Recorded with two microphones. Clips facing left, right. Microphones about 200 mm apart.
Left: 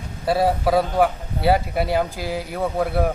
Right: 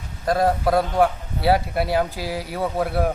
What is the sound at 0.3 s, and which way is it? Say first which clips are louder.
A man's voice: even; 5° left (ahead or behind).